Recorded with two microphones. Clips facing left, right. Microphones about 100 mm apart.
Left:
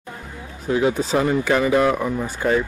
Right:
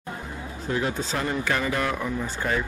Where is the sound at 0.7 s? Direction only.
20° left (ahead or behind).